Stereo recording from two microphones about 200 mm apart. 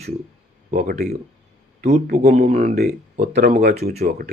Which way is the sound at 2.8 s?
50° right (ahead or behind).